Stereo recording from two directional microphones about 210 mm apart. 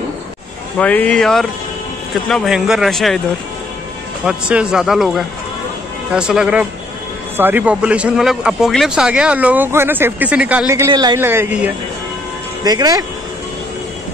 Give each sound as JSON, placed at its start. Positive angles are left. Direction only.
{"t": 0.7, "sound": "speech", "side_deg": 5}
{"t": 4.2, "sound": "speech", "side_deg": -5}